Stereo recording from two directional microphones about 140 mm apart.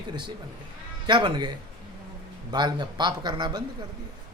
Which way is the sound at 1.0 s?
35° right (ahead or behind).